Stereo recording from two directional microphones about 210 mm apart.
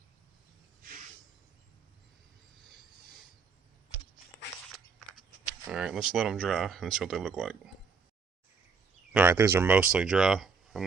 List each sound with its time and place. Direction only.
0.8 s a sound: 40° right (ahead or behind)
5.6 s speech: 5° right (ahead or behind)
9.1 s speech: 10° right (ahead or behind)